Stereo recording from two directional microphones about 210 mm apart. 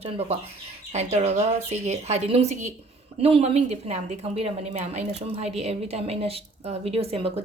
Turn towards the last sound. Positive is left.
turn(degrees=-30)  # may be behind; listen again after turning